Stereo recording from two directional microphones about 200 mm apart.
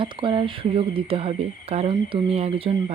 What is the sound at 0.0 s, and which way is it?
Speech, 25° right (ahead or behind).